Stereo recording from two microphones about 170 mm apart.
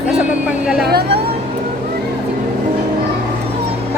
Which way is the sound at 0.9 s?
70° right (ahead or behind).